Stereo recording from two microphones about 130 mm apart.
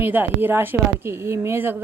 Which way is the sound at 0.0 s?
15° right (ahead or behind).